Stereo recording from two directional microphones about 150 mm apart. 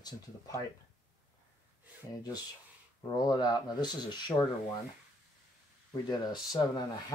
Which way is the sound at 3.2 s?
25° left (ahead or behind).